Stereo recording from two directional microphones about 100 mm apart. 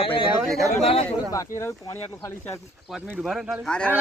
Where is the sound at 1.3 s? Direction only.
30° left (ahead or behind).